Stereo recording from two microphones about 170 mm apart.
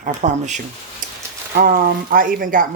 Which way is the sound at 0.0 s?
45° right (ahead or behind).